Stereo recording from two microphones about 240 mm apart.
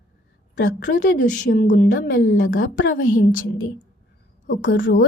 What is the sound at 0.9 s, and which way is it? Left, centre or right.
Speech, left.